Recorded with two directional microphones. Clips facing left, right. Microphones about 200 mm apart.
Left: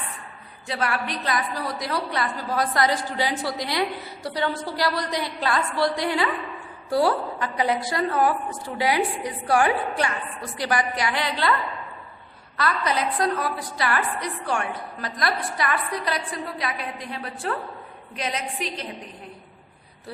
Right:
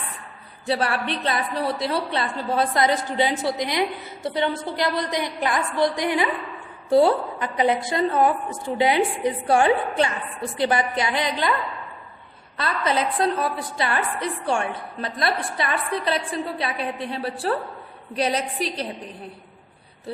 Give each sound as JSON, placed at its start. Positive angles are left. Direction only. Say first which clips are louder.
{"t": 0.7, "sound": "a woman's voice", "louder": "right 4 dB", "side_deg": -30}
{"t": 12.5, "sound": "a woman's voice", "louder": "right 1 dB", "side_deg": -25}